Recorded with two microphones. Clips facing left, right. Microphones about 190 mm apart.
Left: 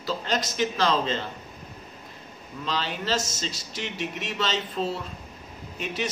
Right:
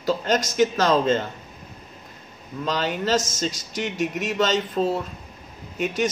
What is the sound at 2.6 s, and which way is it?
A man's voice, 45° right (ahead or behind).